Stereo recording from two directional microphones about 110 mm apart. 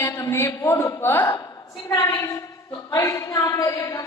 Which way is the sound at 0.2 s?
25° left (ahead or behind).